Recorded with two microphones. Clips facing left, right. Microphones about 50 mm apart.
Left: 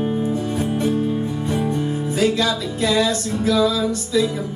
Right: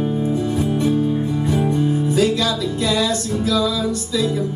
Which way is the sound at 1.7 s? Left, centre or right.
Left.